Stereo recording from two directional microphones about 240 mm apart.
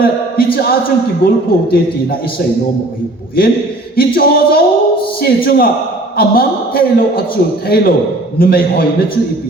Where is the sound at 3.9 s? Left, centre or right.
Left.